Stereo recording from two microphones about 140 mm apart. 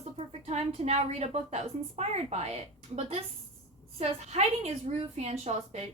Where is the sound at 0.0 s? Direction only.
50° right (ahead or behind).